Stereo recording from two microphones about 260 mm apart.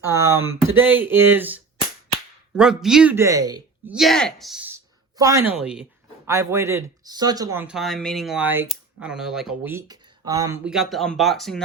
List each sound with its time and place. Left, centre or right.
0.3 s speech: right
0.8 s speech: centre
3.9 s speech: centre
10.6 s speech: centre